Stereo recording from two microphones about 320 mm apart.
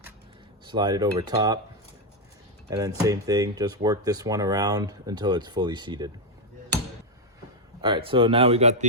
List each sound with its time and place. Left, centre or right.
0.7 s speech: centre
2.6 s speech: centre
7.8 s speech: centre